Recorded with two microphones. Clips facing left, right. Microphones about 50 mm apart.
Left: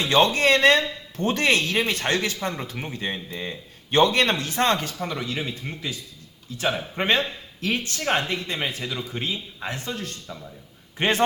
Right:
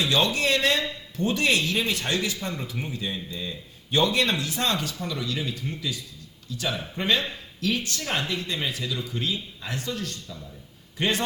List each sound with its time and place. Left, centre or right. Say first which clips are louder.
0.0 s a man's voice: left 4 dB; left